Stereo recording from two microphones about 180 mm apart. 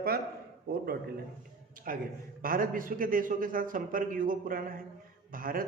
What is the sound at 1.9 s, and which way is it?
A man's voice, 50° right (ahead or behind).